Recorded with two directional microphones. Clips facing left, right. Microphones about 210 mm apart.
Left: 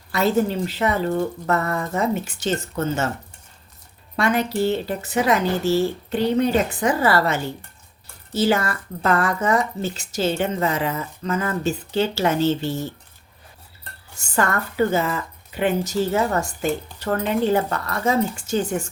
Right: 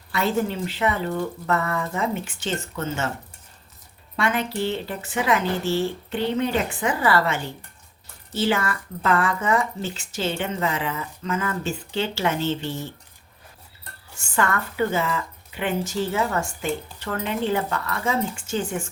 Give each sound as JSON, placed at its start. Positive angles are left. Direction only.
{"t": 0.1, "sound": "a woman's voice", "side_deg": 40}
{"t": 4.2, "sound": "a woman's voice", "side_deg": 40}
{"t": 14.3, "sound": "a woman's voice", "side_deg": 40}